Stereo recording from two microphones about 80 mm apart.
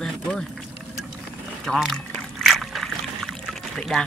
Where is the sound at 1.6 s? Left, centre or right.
Centre.